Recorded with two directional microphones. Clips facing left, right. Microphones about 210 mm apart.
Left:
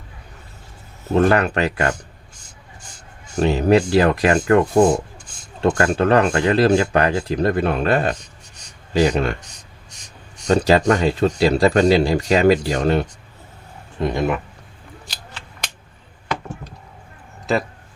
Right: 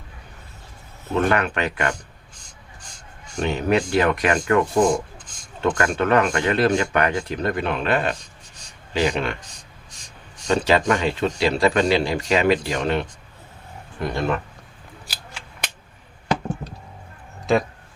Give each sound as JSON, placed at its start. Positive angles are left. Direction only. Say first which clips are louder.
{"t": 1.1, "sound": "speech", "louder": "left 5 dB", "side_deg": 35}
{"t": 3.3, "sound": "speech", "louder": "left 5 dB", "side_deg": 35}
{"t": 10.4, "sound": "speech", "louder": "left 4 dB", "side_deg": 40}
{"t": 14.0, "sound": "speech", "louder": "left 3 dB", "side_deg": 15}
{"t": 15.0, "sound": "scissors", "louder": "right 1 dB", "side_deg": -5}